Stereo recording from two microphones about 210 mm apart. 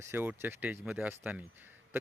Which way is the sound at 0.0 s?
10° right (ahead or behind).